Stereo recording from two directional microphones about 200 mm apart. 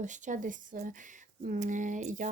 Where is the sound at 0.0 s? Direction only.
40° right (ahead or behind).